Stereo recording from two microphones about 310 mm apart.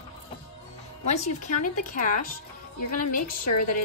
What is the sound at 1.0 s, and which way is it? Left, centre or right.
Speech, left.